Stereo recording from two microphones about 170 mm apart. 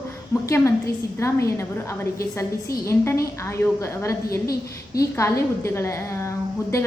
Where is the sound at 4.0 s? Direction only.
15° left (ahead or behind).